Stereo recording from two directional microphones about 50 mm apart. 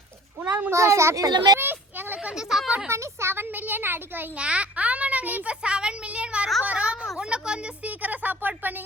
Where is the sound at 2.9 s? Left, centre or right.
Right.